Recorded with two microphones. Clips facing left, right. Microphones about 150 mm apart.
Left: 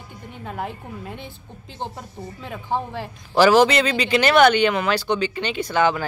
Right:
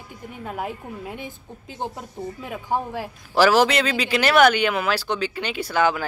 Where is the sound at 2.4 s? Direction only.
10° right (ahead or behind).